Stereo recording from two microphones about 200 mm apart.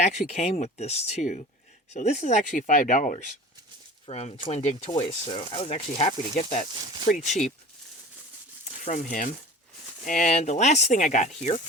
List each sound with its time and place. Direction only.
0.0 s speech: 35° left (ahead or behind)
8.8 s speech: 35° left (ahead or behind)